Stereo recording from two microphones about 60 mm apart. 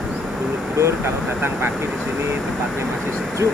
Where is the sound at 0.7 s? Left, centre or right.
Right.